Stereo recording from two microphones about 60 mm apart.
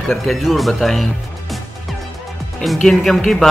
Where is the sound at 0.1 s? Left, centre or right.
Centre.